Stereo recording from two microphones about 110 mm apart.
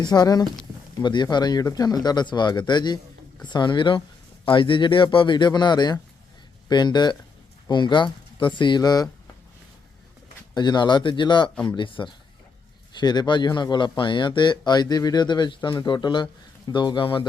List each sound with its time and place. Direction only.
0.0 s a man's voice: 40° left (ahead or behind)
10.5 s a man's voice: 40° left (ahead or behind)